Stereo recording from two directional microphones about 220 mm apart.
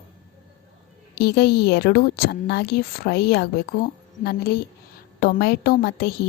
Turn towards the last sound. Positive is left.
turn(degrees=45)  # may be behind; listen again after turning